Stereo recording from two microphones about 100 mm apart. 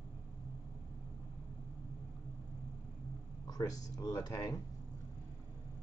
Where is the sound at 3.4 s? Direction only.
40° left (ahead or behind).